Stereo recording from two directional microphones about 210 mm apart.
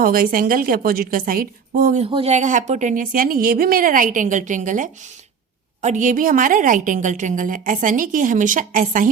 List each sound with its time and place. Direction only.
0.0 s a woman's voice: 45° right (ahead or behind)
2.0 s a woman's voice: 25° right (ahead or behind)